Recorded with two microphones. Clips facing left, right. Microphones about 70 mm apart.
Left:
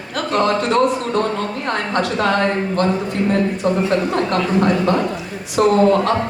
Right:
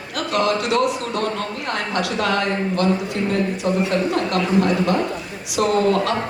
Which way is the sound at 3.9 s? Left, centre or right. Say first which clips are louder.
Left 2 dB; left.